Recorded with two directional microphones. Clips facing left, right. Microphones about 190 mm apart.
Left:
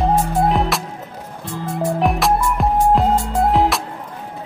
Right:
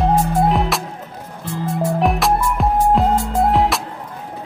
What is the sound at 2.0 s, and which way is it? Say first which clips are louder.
Music: even; centre (ahead or behind).